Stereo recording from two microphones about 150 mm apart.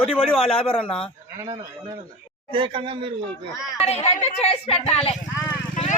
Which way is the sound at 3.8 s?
45° left (ahead or behind).